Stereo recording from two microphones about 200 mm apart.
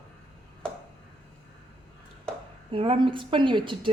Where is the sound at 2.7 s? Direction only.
25° right (ahead or behind).